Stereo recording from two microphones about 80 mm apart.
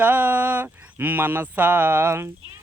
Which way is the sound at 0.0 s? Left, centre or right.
Right.